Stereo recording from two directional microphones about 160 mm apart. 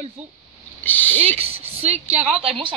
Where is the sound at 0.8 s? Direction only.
10° left (ahead or behind).